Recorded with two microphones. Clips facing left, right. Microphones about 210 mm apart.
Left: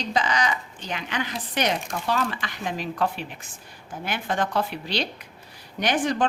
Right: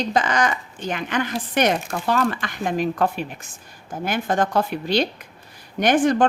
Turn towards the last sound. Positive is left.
turn(degrees=-50)  # may be behind; listen again after turning